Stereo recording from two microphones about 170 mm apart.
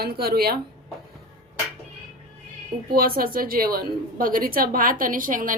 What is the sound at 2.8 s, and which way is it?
A woman's voice, 60° right (ahead or behind).